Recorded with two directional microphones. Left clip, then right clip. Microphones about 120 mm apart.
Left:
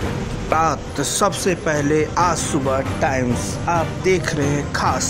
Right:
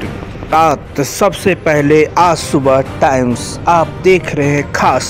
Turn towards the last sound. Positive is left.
turn(degrees=-30)  # may be behind; listen again after turning